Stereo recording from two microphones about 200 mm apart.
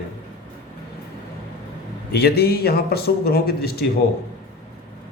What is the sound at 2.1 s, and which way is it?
A man's voice, 55° left (ahead or behind).